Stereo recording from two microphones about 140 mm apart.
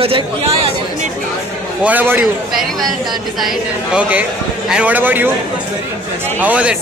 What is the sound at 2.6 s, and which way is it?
Speech, centre (ahead or behind).